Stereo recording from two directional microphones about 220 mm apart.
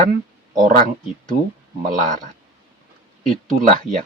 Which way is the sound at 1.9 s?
35° right (ahead or behind).